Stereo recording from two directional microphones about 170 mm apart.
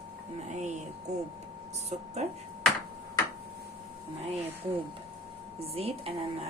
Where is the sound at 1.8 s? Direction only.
40° right (ahead or behind).